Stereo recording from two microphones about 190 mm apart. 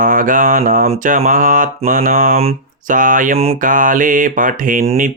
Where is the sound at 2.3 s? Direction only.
40° right (ahead or behind).